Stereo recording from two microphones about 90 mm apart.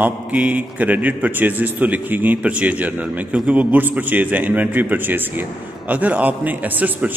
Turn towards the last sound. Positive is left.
turn(degrees=-20)  # may be behind; listen again after turning